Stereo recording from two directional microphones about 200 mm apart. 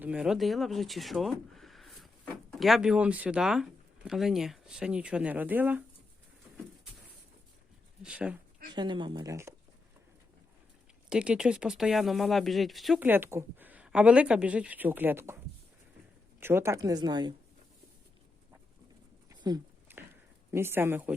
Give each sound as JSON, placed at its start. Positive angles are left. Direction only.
{"t": 0.0, "sound": "speech", "side_deg": -5}
{"t": 8.0, "sound": "speech", "side_deg": -5}
{"t": 8.7, "sound": "speech", "side_deg": -20}
{"t": 11.1, "sound": "speech", "side_deg": -5}
{"t": 16.4, "sound": "speech", "side_deg": -10}
{"t": 19.3, "sound": "a sound", "side_deg": -20}
{"t": 20.5, "sound": "speech", "side_deg": -10}